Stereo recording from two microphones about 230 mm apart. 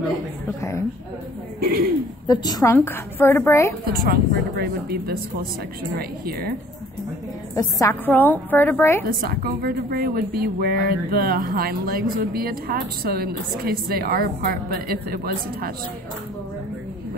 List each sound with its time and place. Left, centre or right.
0.5 s a woman's voice: centre
1.6 s speech: right
2.2 s a woman's voice: centre
3.8 s a woman's voice: right
7.5 s a woman's voice: centre
9.0 s a woman's voice: right